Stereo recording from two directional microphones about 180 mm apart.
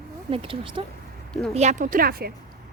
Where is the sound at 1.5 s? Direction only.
40° right (ahead or behind); by 2.3 s 55° right (ahead or behind).